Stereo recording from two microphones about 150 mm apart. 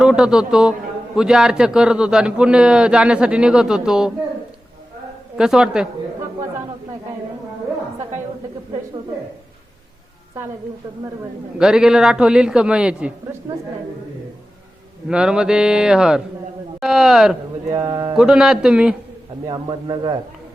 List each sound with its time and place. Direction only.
0.0 s a man's voice: 5° right (ahead or behind)
5.4 s a man's voice: 5° right (ahead or behind)
11.5 s a man's voice: 5° right (ahead or behind)
15.1 s a man's voice: 5° right (ahead or behind)
17.7 s a man's voice: 20° right (ahead or behind)
18.2 s a man's voice: 5° right (ahead or behind)
19.5 s a man's voice: 25° right (ahead or behind)